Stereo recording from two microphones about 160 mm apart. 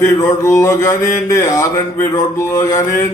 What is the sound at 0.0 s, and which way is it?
Speech, 20° left (ahead or behind).